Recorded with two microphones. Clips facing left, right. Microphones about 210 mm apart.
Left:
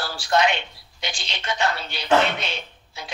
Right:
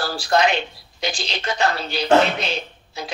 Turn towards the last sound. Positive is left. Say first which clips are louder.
# right 7 dB
turn(degrees=-35)  # may be behind; listen again after turning